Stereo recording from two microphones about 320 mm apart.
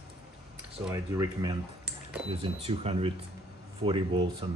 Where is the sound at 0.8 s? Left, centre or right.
Centre.